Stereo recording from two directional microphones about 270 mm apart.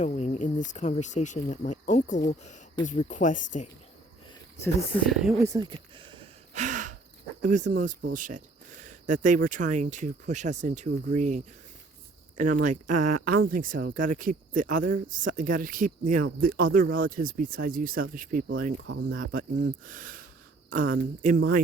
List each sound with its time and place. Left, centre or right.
0.0 s speech: left
4.6 s speech: centre
5.5 s gasp: centre
7.4 s speech: right
12.5 s speech: right
13.0 s speech: right
13.5 s speech: right